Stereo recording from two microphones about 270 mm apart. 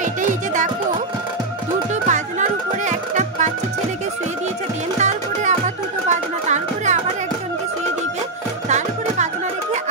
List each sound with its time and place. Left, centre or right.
0.0 s music: right
2.0 s music: right
4.9 s music: right
8.6 s music: right